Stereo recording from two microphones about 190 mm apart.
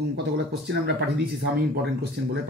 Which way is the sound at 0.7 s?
60° right (ahead or behind).